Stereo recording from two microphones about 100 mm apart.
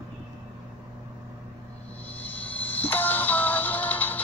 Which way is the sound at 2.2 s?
15° left (ahead or behind).